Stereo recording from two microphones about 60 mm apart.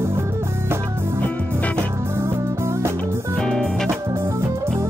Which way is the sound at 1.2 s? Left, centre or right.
Left.